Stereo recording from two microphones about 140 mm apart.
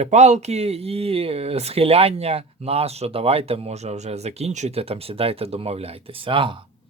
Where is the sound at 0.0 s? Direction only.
50° right (ahead or behind).